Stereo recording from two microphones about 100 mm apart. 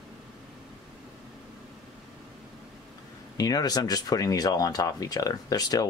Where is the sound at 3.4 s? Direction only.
40° left (ahead or behind).